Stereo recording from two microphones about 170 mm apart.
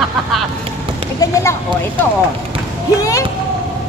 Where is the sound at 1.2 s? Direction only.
20° left (ahead or behind).